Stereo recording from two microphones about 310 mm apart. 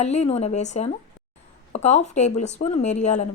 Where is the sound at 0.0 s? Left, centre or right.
Left.